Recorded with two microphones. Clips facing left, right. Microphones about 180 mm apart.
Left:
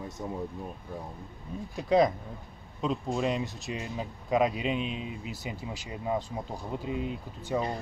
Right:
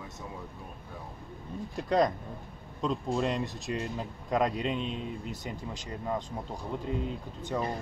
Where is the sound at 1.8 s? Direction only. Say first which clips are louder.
Left 3 dB; 5° left (ahead or behind).